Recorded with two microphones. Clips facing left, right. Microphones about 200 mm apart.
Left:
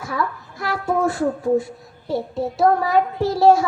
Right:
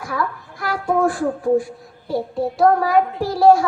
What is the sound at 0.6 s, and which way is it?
A woman's voice, 25° left (ahead or behind).